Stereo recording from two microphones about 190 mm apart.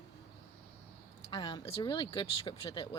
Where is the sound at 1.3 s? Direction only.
25° left (ahead or behind).